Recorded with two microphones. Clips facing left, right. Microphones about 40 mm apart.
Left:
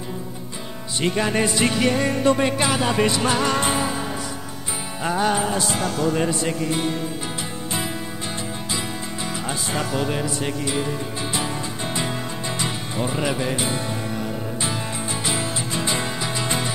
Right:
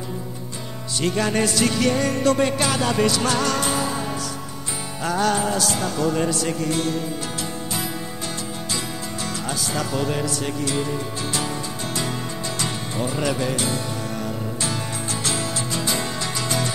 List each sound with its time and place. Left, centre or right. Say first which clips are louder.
1.0 s music: even; centre
5.0 s music: even; centre
5.8 s speech: even; centre
8.7 s music: even; left
15.2 s music: even; centre